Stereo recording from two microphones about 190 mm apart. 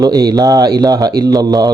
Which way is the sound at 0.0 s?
20° right (ahead or behind).